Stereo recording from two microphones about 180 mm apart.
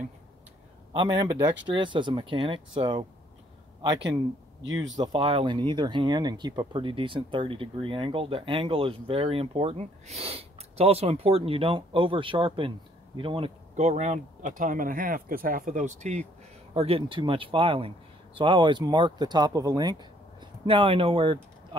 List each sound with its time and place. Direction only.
0.9 s speech: 20° right (ahead or behind)
4.9 s speech: 25° right (ahead or behind)